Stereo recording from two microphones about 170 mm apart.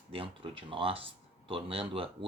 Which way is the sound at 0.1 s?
35° right (ahead or behind).